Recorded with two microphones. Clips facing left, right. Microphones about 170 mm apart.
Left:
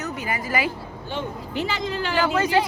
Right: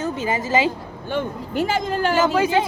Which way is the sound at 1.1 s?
50° right (ahead or behind).